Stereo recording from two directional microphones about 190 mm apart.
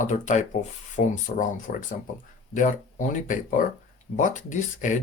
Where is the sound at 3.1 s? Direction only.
45° left (ahead or behind).